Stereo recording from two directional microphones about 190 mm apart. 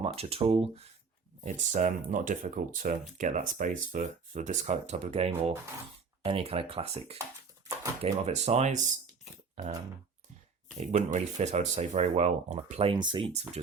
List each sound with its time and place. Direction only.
0.0 s speech: 30° right (ahead or behind)
10.8 s speech: 35° right (ahead or behind)